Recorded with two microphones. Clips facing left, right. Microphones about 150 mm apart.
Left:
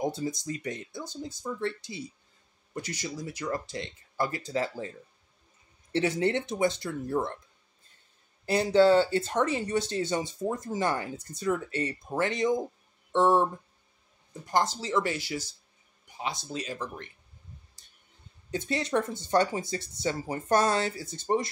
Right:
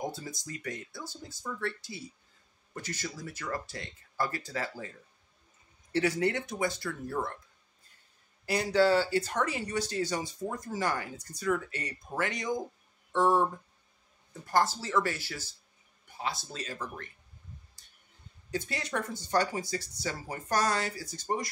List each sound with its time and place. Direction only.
0.1 s speech: 20° left (ahead or behind)
8.5 s speech: 25° left (ahead or behind)
18.5 s speech: 25° left (ahead or behind)